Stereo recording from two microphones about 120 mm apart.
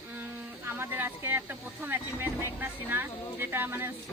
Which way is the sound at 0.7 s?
20° right (ahead or behind).